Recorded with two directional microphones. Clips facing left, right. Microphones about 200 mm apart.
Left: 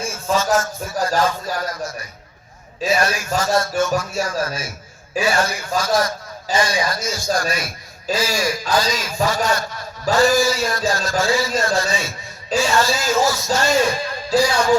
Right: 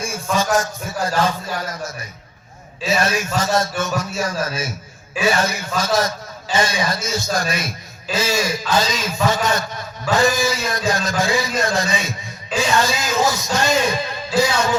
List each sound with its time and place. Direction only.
0.3 s a man's voice: 35° left (ahead or behind)
2.9 s a man's voice: 20° right (ahead or behind)